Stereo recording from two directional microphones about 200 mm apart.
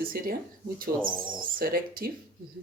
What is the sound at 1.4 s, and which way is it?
Speech, 45° right (ahead or behind).